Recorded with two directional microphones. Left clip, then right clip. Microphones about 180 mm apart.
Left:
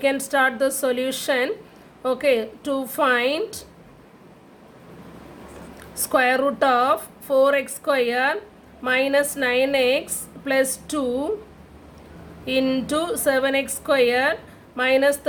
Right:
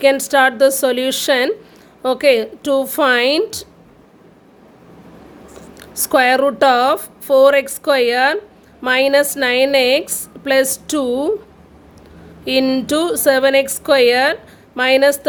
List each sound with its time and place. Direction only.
0.0 s a woman's voice: 50° right (ahead or behind)
5.9 s a woman's voice: 50° right (ahead or behind)
12.5 s a woman's voice: 50° right (ahead or behind)